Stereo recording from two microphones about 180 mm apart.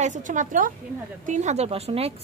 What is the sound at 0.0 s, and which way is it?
A woman's voice, 45° right (ahead or behind).